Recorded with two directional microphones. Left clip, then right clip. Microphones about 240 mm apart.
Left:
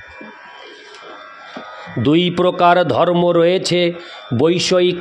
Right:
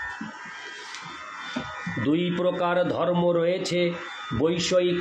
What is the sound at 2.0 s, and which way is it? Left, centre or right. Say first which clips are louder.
A man's voice: left 10 dB; left.